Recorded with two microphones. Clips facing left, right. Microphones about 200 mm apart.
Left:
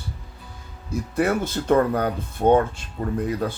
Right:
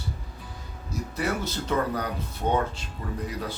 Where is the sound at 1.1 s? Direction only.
50° left (ahead or behind).